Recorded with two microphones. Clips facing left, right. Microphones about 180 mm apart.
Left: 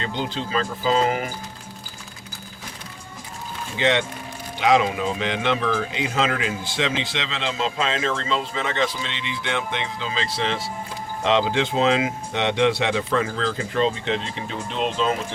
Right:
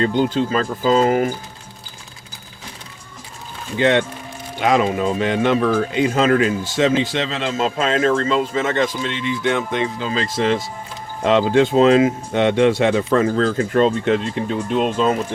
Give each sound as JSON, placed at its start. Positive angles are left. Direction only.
{"t": 0.0, "sound": "a man's voice", "side_deg": -50}
{"t": 3.8, "sound": "a man's voice", "side_deg": -50}